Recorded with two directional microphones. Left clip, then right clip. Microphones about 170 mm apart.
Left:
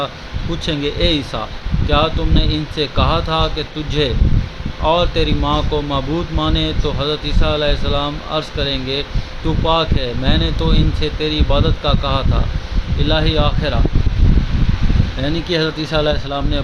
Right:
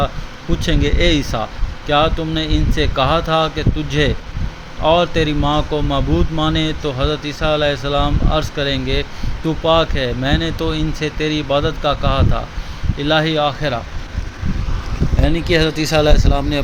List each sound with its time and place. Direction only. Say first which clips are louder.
0.6 s speech: right 1 dB; 15° right (ahead or behind)
15.2 s speech: right 2 dB; 10° right (ahead or behind)